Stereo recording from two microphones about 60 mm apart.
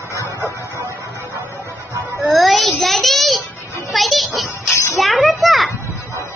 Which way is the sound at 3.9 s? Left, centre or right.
Centre.